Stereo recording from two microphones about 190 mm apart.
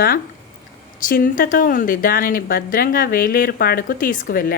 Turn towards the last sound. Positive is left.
turn(degrees=50)  # may be behind; listen again after turning